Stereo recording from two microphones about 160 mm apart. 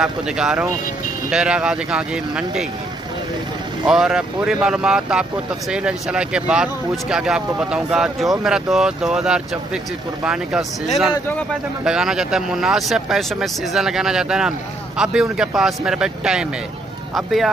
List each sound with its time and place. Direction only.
0.0 s speech: 5° right (ahead or behind)
3.8 s speech: 5° right (ahead or behind)
11.8 s speech: 5° right (ahead or behind)